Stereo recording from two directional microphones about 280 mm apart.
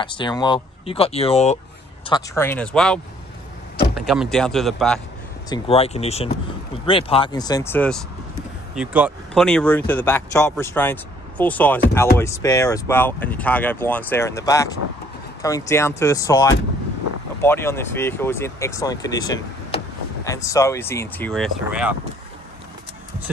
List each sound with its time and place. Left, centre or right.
0.0 s speech: centre
2.0 s speech: centre
4.0 s a man's voice: centre
5.5 s speech: left; by 21.9 s centre